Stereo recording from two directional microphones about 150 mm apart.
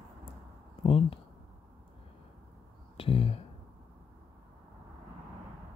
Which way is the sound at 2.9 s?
40° left (ahead or behind).